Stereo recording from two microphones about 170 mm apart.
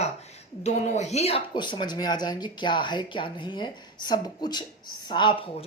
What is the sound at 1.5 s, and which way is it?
A woman's voice, 25° left (ahead or behind).